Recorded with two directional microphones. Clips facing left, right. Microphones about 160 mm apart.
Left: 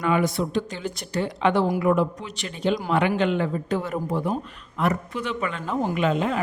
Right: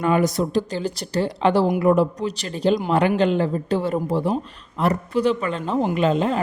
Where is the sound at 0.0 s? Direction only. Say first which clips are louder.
Right 3 dB; 40° right (ahead or behind).